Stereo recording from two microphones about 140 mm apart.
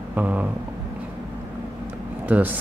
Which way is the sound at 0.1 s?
10° right (ahead or behind).